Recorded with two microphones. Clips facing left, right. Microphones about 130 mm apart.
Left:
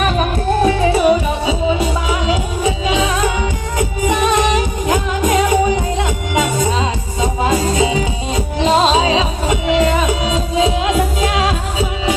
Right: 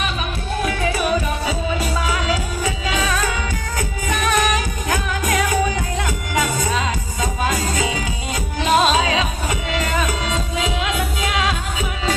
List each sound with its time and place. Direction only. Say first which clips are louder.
0.6 s music: left 8 dB; 30° left (ahead or behind)